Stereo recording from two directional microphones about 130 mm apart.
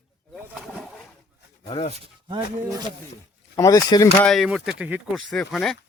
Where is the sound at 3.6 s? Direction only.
25° left (ahead or behind).